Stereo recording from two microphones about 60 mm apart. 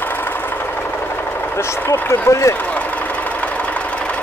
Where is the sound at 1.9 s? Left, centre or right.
Left.